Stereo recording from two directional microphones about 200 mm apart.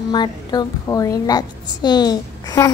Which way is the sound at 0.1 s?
20° left (ahead or behind).